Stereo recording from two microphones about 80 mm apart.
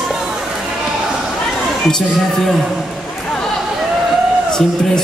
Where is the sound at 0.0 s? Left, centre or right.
Centre.